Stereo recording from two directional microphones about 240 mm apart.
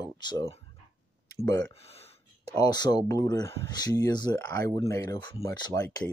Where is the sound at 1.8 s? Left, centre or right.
Left.